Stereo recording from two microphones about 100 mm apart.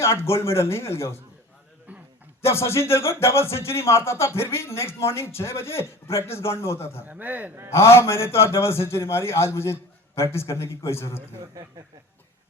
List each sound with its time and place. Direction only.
0.0 s speech: 25° left (ahead or behind)
1.9 s a sound: 15° right (ahead or behind)
2.4 s speech: 25° left (ahead or behind)
7.0 s a man's voice: 15° right (ahead or behind)
7.7 s speech: 25° left (ahead or behind)